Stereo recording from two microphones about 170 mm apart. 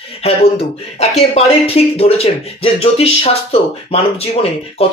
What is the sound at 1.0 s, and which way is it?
Speech, 40° left (ahead or behind).